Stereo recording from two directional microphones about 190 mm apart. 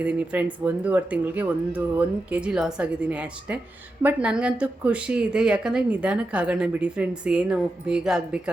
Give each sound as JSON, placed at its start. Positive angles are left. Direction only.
{"t": 0.0, "sound": "speech", "side_deg": -5}